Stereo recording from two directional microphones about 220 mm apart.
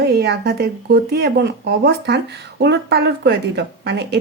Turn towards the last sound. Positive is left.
turn(degrees=-50)  # may be behind; listen again after turning